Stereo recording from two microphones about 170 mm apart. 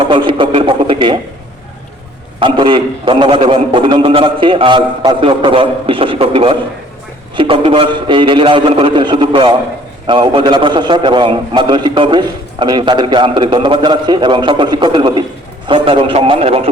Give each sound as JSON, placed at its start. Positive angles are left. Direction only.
{"t": 0.1, "sound": "a man's voice", "side_deg": -30}
{"t": 2.4, "sound": "a man's voice", "side_deg": -30}